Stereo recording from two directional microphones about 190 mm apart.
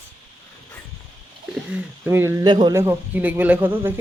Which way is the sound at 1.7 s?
10° right (ahead or behind).